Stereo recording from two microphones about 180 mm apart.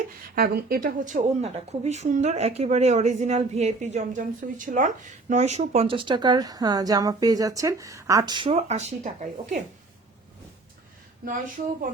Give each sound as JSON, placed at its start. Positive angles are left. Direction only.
{"t": 0.3, "sound": "speech", "side_deg": -55}